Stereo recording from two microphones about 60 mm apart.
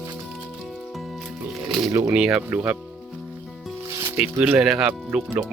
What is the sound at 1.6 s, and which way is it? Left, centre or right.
Music, centre.